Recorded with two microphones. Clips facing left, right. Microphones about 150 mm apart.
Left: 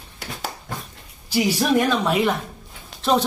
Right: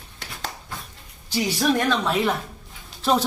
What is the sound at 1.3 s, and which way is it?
Speech, 5° left (ahead or behind).